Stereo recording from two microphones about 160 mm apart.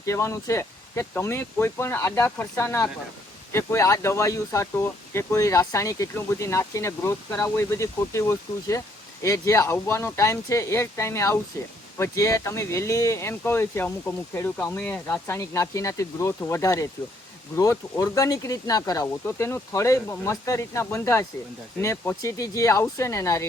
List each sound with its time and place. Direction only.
0.0 s speech: 20° left (ahead or behind)